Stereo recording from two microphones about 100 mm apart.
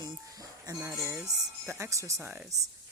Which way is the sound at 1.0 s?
25° right (ahead or behind).